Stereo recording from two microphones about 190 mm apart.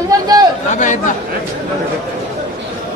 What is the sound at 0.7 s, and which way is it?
Speech, 40° left (ahead or behind).